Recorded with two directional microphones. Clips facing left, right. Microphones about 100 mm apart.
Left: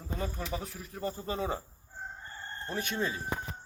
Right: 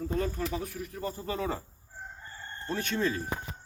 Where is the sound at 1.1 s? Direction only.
20° left (ahead or behind).